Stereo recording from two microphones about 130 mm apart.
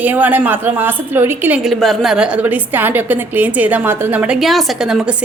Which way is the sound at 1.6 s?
Centre (ahead or behind).